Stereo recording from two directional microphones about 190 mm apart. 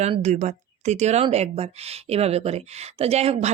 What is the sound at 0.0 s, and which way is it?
Speech, 35° right (ahead or behind).